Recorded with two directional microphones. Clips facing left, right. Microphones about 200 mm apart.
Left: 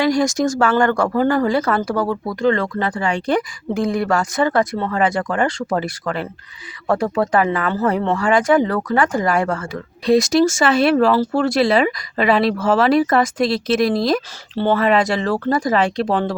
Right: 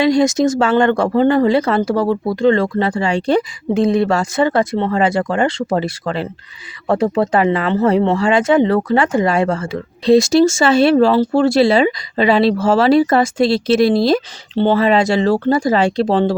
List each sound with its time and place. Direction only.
0.0 s speech: 25° right (ahead or behind)